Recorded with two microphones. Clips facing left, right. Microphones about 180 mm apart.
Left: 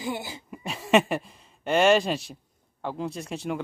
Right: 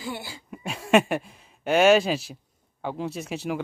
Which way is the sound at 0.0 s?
20° left (ahead or behind).